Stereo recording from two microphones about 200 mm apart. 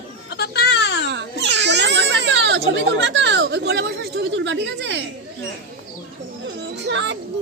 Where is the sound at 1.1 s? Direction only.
60° right (ahead or behind).